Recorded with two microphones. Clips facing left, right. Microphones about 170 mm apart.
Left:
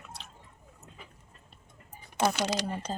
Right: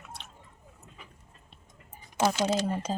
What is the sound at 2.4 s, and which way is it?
Speech, 80° left.